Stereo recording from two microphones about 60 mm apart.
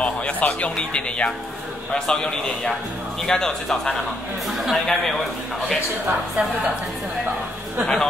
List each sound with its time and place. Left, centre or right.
0.0 s a man's voice: left
4.6 s speech: centre
7.8 s a man's voice: centre